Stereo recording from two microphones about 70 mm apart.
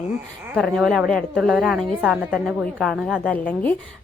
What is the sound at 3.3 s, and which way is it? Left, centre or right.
Speech, left.